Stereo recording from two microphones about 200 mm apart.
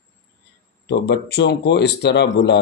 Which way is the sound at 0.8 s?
55° left (ahead or behind).